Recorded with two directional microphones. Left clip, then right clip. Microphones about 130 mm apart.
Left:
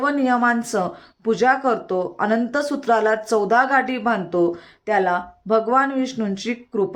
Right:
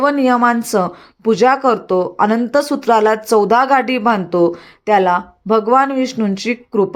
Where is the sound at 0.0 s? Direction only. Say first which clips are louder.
Right 6 dB; 35° right (ahead or behind).